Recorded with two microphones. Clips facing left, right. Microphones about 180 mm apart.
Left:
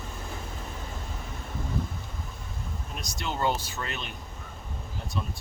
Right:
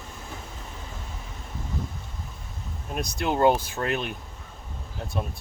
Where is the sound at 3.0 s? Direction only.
55° right (ahead or behind).